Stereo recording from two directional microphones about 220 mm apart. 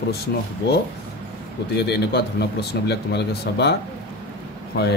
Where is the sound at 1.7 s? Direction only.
45° left (ahead or behind).